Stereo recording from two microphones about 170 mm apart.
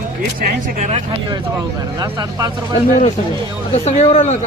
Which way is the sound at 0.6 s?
45° right (ahead or behind).